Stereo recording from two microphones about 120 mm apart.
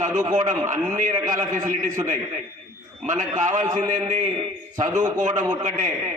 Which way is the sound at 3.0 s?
90° right.